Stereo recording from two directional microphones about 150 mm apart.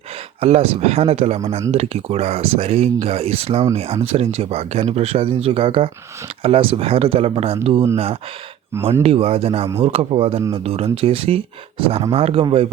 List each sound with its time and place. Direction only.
0.3 s speech: 40° right (ahead or behind)